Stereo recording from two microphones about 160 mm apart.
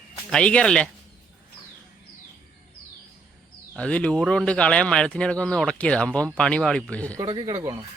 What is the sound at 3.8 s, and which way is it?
A man's voice, 5° left (ahead or behind).